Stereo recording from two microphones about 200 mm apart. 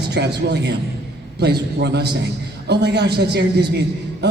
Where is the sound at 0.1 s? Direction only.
55° right (ahead or behind).